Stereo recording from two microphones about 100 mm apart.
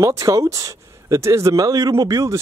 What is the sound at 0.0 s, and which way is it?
Speech, 35° right (ahead or behind).